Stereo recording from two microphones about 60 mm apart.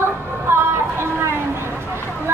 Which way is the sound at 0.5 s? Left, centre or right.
Right.